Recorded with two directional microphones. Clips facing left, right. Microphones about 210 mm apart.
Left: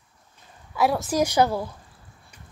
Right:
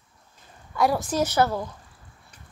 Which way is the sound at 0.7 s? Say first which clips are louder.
Left 1 dB; 5° left (ahead or behind).